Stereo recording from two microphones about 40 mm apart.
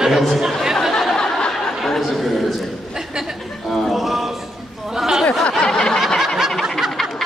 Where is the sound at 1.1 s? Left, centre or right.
Centre.